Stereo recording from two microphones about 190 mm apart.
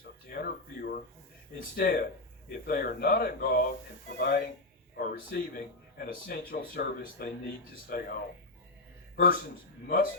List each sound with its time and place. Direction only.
0.3 s a sound: 50° left (ahead or behind)
1.5 s speech: 50° left (ahead or behind)
9.1 s a man's voice: 50° left (ahead or behind)